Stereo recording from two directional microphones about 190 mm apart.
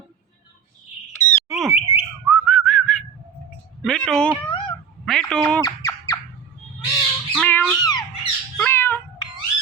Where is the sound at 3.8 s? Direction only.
Centre (ahead or behind).